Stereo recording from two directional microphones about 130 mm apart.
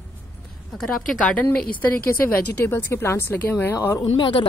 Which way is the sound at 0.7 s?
5° left (ahead or behind).